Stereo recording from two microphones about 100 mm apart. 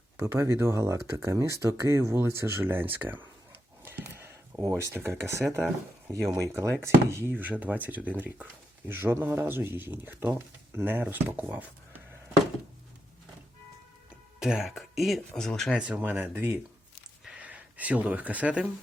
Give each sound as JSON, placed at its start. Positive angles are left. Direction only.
{"t": 0.2, "sound": "speech", "side_deg": -25}
{"t": 3.5, "sound": "a sound", "side_deg": -20}
{"t": 4.7, "sound": "speech", "side_deg": -25}
{"t": 14.3, "sound": "speech", "side_deg": -5}
{"t": 16.0, "sound": "speech", "side_deg": -20}